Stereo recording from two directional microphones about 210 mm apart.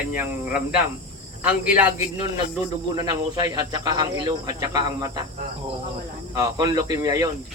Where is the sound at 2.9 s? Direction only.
20° right (ahead or behind).